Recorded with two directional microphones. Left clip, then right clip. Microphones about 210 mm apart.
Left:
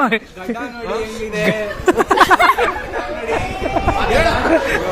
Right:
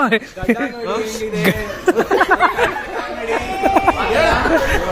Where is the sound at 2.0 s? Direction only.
10° left (ahead or behind).